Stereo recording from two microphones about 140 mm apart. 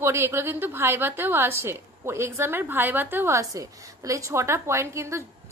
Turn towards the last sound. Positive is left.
turn(degrees=-20)  # may be behind; listen again after turning